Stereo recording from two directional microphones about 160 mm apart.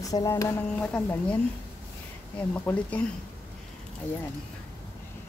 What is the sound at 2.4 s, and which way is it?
Speech, 10° left (ahead or behind).